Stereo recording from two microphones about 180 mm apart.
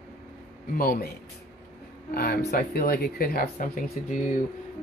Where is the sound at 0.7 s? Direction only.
55° left (ahead or behind).